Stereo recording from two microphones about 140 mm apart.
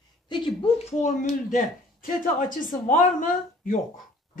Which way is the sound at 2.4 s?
75° left (ahead or behind).